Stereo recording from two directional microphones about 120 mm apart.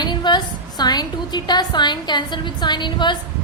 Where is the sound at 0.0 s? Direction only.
40° left (ahead or behind).